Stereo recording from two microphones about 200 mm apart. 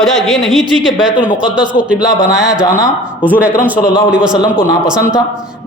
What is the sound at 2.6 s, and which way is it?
Speech, 15° left (ahead or behind).